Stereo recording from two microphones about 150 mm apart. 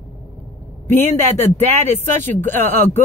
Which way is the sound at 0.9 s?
15° left (ahead or behind).